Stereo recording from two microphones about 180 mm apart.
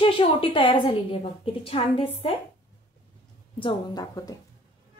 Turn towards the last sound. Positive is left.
turn(degrees=20)  # may be behind; listen again after turning